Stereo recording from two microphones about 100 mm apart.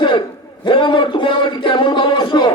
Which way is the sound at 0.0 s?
50° left (ahead or behind).